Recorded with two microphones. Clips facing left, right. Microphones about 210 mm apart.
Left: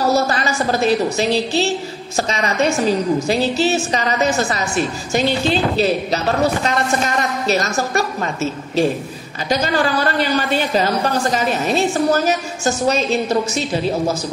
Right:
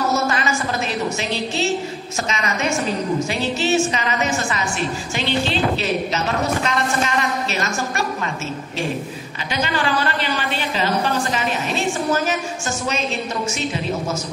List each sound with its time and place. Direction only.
0.1 s a woman's voice: 35° left (ahead or behind)
9.5 s a woman's voice: 40° left (ahead or behind)